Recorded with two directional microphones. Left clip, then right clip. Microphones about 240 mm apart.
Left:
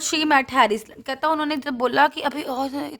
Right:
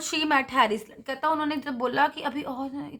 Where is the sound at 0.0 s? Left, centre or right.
Left.